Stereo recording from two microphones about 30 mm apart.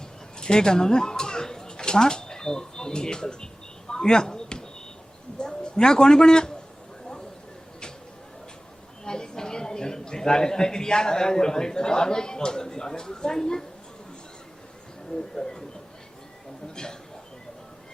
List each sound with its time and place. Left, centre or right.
0.3 s a sound: left
5.4 s a man's voice: left
9.0 s a woman's voice: left
15.1 s speech: left